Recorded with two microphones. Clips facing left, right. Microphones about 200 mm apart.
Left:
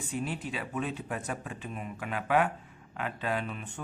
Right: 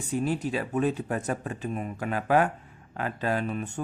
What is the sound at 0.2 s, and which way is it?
Speech, 40° right (ahead or behind).